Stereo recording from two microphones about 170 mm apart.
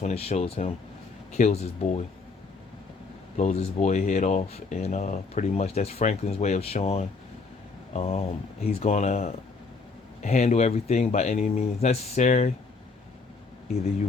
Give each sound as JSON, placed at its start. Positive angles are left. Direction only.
{"t": 0.0, "sound": "speech", "side_deg": 35}
{"t": 3.3, "sound": "speech", "side_deg": 40}